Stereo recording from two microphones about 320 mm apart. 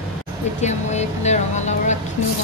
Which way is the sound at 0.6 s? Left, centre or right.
Left.